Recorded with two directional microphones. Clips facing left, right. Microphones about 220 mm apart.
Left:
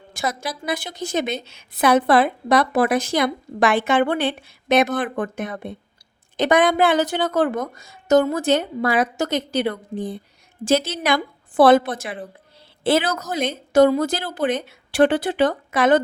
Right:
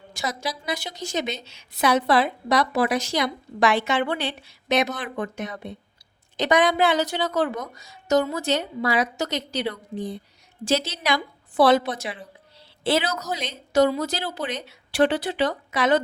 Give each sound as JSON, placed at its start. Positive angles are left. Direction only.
{"t": 0.1, "sound": "a woman's voice", "side_deg": 50}